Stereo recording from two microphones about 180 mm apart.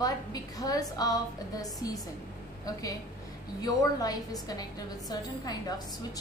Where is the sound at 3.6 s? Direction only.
20° left (ahead or behind).